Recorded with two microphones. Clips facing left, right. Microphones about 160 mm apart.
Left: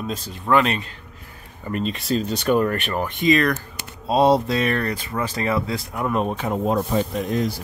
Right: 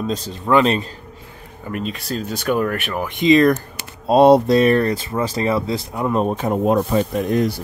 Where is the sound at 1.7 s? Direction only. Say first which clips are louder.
Left 2 dB; centre (ahead or behind); by 3.6 s 25° right (ahead or behind).